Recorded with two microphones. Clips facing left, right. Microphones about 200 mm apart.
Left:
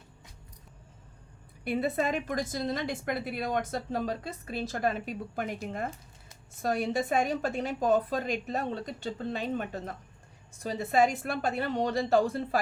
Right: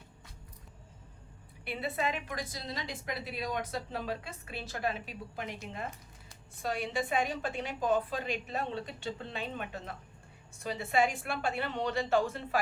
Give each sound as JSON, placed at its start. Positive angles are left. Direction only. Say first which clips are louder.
{"t": 1.6, "sound": "a woman's voice", "louder": "left 6 dB", "side_deg": 45}